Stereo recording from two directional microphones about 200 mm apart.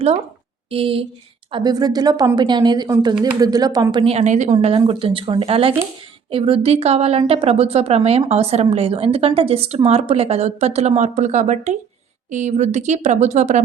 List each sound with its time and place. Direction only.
0.7 s a woman's voice: 25° right (ahead or behind)
4.0 s a woman's voice: 30° right (ahead or behind)
4.5 s a woman's voice: 25° right (ahead or behind)